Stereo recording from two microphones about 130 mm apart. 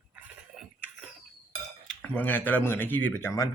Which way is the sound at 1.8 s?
10° left (ahead or behind).